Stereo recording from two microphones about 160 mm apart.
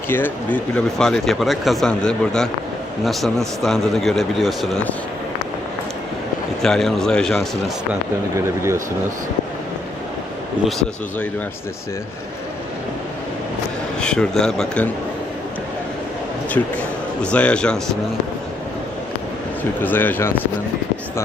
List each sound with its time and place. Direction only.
0.1 s speech: 10° left (ahead or behind)
6.6 s speech: 5° left (ahead or behind)
8.4 s speech: 15° right (ahead or behind)
14.0 s speech: 5° left (ahead or behind)
17.3 s speech: 5° left (ahead or behind)
19.8 s speech: 10° left (ahead or behind)